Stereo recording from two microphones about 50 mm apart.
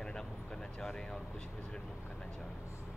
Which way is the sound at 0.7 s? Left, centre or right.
Centre.